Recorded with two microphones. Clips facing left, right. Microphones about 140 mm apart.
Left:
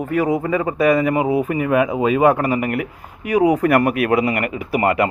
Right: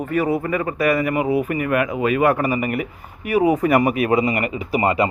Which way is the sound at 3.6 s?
Centre (ahead or behind).